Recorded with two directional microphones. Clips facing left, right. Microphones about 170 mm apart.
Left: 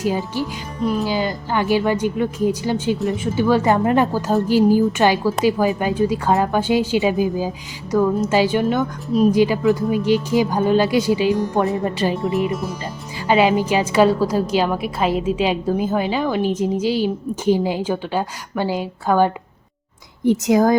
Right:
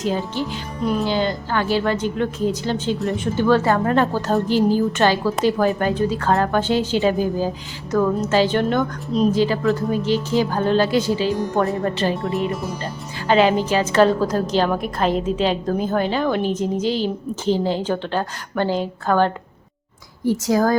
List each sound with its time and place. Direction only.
0.0 s speech: 10° left (ahead or behind)
12.1 s a woman's voice: centre (ahead or behind); by 20.7 s 20° left (ahead or behind)